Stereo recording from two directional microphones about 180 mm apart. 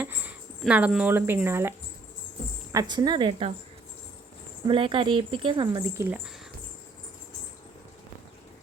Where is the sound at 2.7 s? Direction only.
25° right (ahead or behind).